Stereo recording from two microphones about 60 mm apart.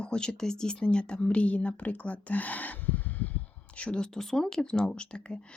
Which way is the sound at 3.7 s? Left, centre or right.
Centre.